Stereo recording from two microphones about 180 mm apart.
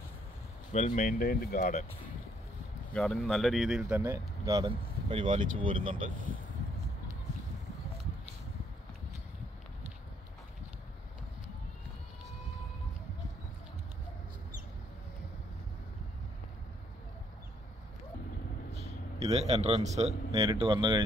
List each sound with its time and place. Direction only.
0.7 s speech: 45° left (ahead or behind)
2.9 s speech: 5° left (ahead or behind)
4.0 s speech: 15° right (ahead or behind)
19.2 s speech: 35° right (ahead or behind)